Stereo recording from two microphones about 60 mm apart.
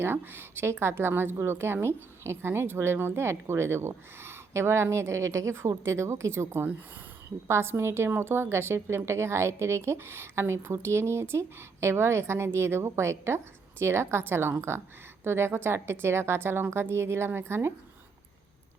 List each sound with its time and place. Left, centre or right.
0.0 s a woman's voice: right